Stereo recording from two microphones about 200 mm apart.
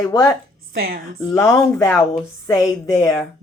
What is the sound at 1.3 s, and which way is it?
A woman's voice, 15° left (ahead or behind).